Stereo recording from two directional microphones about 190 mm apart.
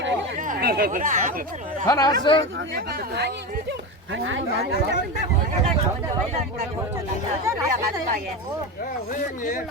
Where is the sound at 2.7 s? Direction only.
50° right (ahead or behind).